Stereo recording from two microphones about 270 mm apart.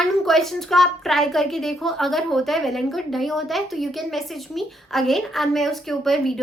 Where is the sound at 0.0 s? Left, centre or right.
Centre.